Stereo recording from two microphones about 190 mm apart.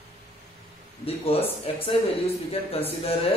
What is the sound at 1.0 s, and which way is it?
Speech, 30° left (ahead or behind).